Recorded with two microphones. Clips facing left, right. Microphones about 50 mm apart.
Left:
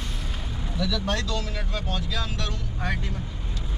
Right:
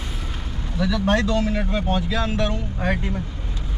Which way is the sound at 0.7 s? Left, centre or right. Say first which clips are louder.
Right 7 dB; right.